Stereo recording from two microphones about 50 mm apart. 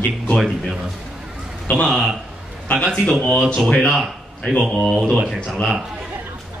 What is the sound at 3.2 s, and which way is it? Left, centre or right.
Speech, left.